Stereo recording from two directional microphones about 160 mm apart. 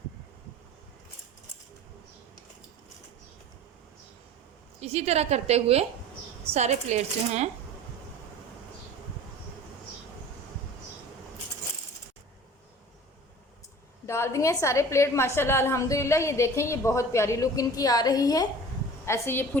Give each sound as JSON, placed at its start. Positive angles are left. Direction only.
{"t": 4.8, "sound": "a woman's voice", "side_deg": -40}
{"t": 14.1, "sound": "a woman's voice", "side_deg": 15}